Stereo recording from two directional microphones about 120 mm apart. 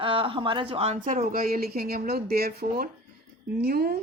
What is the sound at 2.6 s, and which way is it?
Speech, 90° right.